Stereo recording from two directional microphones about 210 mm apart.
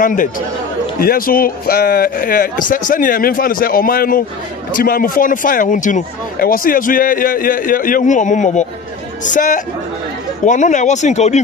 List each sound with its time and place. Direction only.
0.0 s speech: 40° left (ahead or behind)